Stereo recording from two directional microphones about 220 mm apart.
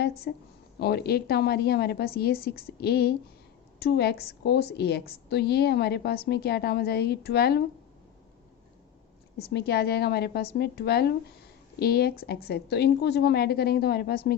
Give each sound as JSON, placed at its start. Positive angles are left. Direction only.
{"t": 0.3, "sound": "a woman's voice", "side_deg": 50}
{"t": 9.4, "sound": "a woman's voice", "side_deg": 45}